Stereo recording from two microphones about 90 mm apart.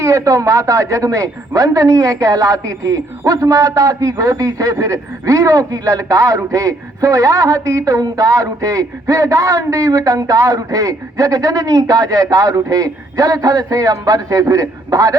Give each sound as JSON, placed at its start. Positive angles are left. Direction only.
{"t": 0.0, "sound": "speech", "side_deg": -35}